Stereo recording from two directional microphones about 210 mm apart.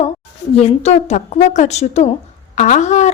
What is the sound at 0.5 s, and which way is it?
A woman's voice, 30° left (ahead or behind).